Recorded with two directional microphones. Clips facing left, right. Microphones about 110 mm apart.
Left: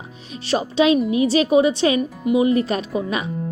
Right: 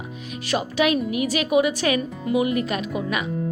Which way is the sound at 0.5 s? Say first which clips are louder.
Left 4 dB; 25° left (ahead or behind).